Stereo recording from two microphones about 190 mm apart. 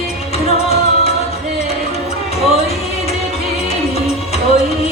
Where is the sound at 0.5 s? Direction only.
30° left (ahead or behind).